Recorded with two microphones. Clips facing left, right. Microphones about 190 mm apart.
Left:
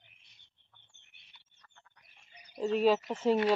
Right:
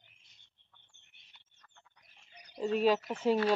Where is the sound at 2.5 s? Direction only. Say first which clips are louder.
Left 1 dB; 5° right (ahead or behind).